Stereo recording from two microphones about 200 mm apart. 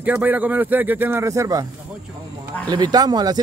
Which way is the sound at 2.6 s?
20° right (ahead or behind).